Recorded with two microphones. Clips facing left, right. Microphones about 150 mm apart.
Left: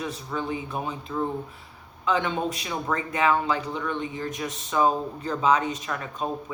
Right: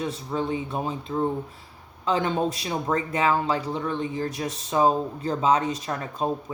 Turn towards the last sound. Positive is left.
turn(degrees=-35)  # may be behind; listen again after turning